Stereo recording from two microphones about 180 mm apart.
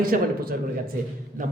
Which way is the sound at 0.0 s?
55° right (ahead or behind).